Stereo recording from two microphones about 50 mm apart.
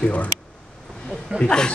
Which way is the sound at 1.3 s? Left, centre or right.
Centre.